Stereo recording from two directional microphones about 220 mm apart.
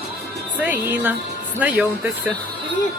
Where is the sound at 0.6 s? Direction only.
10° right (ahead or behind).